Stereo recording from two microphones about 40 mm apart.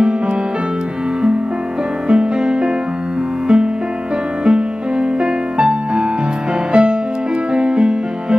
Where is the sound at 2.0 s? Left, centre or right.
Right.